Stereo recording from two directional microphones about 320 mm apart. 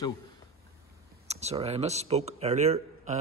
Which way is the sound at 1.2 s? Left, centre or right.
Centre.